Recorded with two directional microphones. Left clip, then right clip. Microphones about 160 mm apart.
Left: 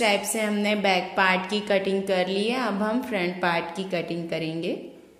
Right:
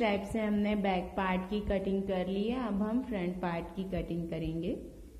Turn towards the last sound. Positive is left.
turn(degrees=15)  # may be behind; listen again after turning